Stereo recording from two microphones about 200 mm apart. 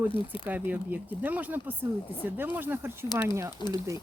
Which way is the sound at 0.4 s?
10° right (ahead or behind).